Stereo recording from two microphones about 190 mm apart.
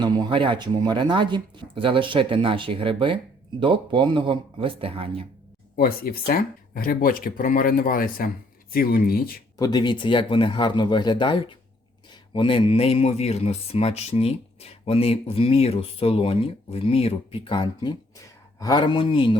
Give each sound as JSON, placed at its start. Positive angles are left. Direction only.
{"t": 0.0, "sound": "speech", "side_deg": -25}
{"t": 5.7, "sound": "speech", "side_deg": 50}
{"t": 9.6, "sound": "speech", "side_deg": 20}